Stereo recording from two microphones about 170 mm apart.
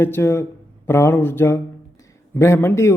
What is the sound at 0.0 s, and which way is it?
Speech, 15° left (ahead or behind).